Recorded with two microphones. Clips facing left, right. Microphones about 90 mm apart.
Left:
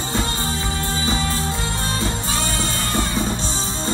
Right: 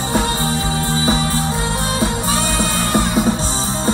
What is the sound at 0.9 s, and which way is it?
Music, 25° right (ahead or behind).